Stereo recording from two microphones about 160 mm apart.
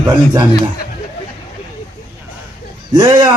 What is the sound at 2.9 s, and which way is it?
Speech, 25° right (ahead or behind).